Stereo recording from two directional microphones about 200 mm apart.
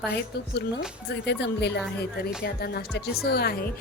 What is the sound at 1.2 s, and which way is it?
Speech, 60° left (ahead or behind).